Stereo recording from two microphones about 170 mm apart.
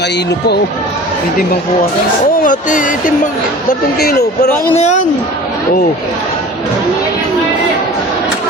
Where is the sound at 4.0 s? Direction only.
70° left (ahead or behind).